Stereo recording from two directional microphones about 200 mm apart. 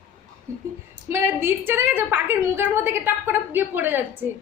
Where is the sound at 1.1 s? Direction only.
10° right (ahead or behind).